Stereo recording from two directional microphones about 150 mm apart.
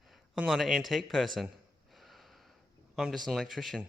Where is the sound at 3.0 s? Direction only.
Centre (ahead or behind).